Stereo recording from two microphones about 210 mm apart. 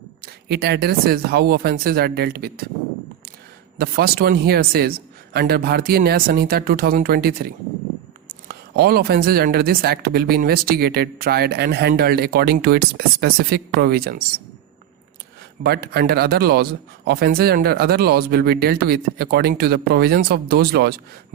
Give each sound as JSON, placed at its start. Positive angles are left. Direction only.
{"t": 0.2, "sound": "speech", "side_deg": -50}
{"t": 3.8, "sound": "speech", "side_deg": -45}
{"t": 15.6, "sound": "speech", "side_deg": -50}